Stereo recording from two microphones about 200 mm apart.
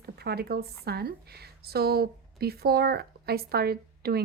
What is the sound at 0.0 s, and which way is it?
Speech, 50° right (ahead or behind).